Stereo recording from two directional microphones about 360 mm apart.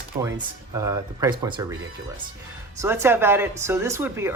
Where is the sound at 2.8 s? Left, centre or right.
Centre.